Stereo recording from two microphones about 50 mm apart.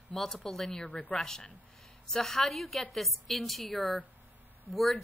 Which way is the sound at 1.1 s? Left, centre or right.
Centre.